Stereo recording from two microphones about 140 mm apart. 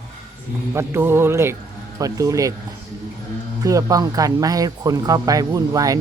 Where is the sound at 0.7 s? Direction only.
20° right (ahead or behind).